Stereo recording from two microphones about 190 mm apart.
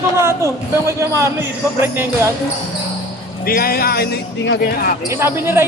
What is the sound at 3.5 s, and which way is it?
A man's voice, 50° left (ahead or behind).